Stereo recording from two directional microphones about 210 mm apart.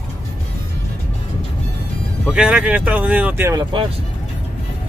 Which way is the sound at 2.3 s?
5° right (ahead or behind).